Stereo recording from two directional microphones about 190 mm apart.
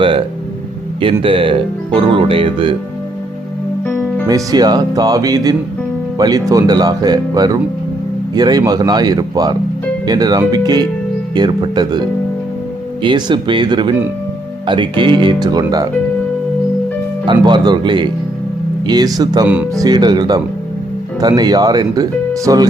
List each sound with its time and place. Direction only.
1.2 s speech: 25° right (ahead or behind)
3.8 s music: 10° left (ahead or behind)
4.3 s speech: 20° right (ahead or behind)
17.2 s speech: 20° right (ahead or behind)